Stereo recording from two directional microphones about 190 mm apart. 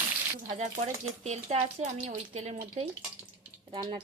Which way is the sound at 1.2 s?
35° right (ahead or behind).